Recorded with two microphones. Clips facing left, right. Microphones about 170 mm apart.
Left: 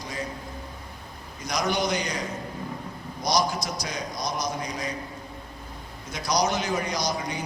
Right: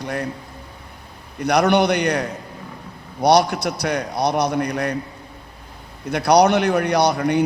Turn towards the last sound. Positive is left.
turn(degrees=-65)  # may be behind; listen again after turning